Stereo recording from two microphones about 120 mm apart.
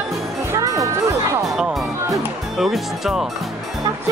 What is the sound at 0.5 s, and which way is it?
Music, 30° right (ahead or behind).